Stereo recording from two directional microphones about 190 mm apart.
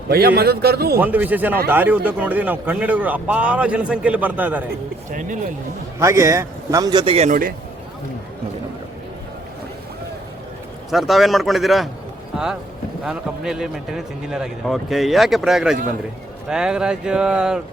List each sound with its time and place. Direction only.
0.1 s a man's voice: 55° right (ahead or behind)
0.9 s a man's voice: 10° right (ahead or behind)
6.0 s a man's voice: 15° right (ahead or behind); by 7.3 s 30° right (ahead or behind)
10.9 s speech: centre (ahead or behind)
13.1 s speech: 5° right (ahead or behind)